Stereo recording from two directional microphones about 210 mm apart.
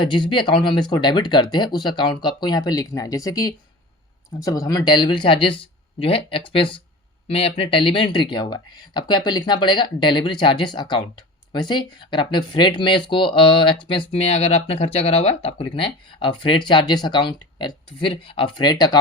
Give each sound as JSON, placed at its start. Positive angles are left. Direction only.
{"t": 0.0, "sound": "speech", "side_deg": 20}